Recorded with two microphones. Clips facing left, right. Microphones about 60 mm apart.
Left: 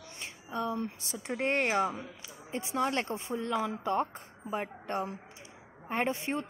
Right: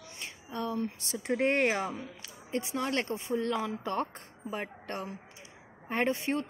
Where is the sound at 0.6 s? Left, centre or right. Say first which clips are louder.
Right 1 dB; left.